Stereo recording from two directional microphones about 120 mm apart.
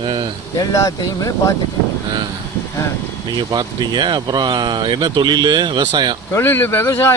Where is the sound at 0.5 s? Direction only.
30° left (ahead or behind).